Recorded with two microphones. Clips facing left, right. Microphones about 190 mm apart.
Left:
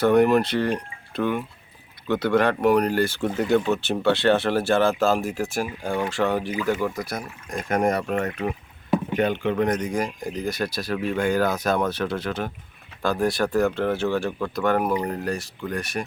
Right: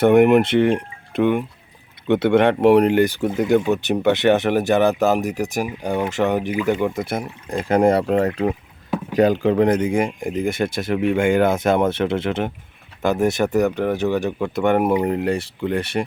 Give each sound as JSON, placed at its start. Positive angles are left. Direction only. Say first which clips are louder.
{"t": 0.0, "sound": "speech", "louder": "right 5 dB", "side_deg": -20}